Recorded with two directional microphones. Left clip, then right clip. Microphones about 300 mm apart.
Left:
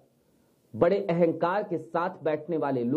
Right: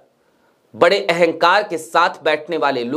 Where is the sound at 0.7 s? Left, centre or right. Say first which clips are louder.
Right 10 dB; centre.